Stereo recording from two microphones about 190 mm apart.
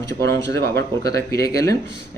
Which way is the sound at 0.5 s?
15° left (ahead or behind).